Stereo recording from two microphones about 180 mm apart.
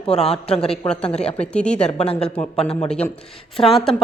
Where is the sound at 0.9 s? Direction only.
5° left (ahead or behind).